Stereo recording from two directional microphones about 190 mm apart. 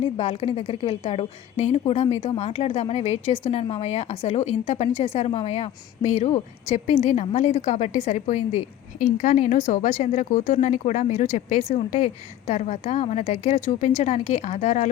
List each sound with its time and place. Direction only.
0.2 s a woman's voice: 30° left (ahead or behind)